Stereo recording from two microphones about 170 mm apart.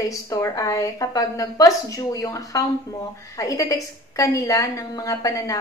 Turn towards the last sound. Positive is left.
turn(degrees=20)  # may be behind; listen again after turning